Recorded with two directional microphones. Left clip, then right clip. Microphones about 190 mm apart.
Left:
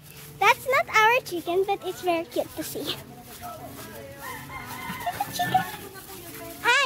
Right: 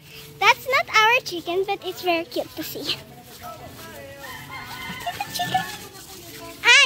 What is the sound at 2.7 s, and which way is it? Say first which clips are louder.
Speech: right 4 dB; 10° left (ahead or behind).